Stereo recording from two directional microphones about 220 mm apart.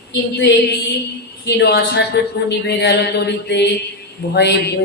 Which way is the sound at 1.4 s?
50° left (ahead or behind).